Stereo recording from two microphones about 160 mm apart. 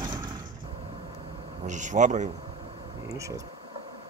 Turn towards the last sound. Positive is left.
turn(degrees=-20)  # may be behind; listen again after turning